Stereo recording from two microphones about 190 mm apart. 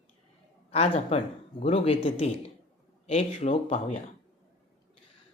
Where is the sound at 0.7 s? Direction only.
35° left (ahead or behind).